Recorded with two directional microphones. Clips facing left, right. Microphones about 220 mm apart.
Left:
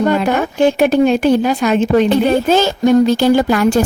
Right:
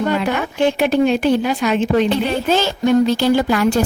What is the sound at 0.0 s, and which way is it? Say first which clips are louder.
Speech: left 4 dB; 45° left (ahead or behind).